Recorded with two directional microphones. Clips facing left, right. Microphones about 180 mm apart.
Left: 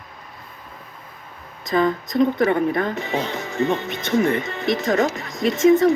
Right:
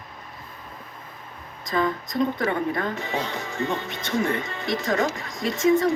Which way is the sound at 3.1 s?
25° left (ahead or behind).